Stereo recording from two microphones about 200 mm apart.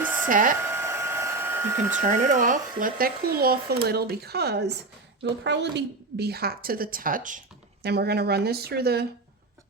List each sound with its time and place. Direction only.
0.0 s hair dryer: 10° right (ahead or behind)
0.3 s a woman's voice: 40° right (ahead or behind)
0.6 s hair dryer: 10° right (ahead or behind)
2.0 s a woman's voice: 35° right (ahead or behind); by 9.0 s 55° right (ahead or behind)